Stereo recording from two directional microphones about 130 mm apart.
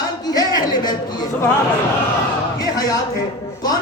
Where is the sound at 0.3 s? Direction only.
30° left (ahead or behind).